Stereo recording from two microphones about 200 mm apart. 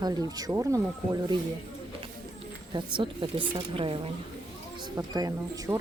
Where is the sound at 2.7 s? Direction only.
25° right (ahead or behind).